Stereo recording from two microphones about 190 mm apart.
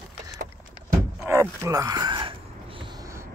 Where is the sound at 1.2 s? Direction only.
15° right (ahead or behind).